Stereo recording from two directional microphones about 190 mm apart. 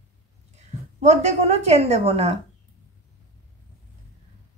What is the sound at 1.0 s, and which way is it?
A woman's voice, 35° right (ahead or behind).